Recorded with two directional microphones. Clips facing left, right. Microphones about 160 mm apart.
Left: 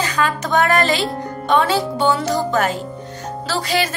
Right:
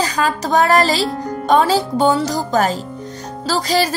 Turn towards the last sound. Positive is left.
turn(degrees=-35)  # may be behind; listen again after turning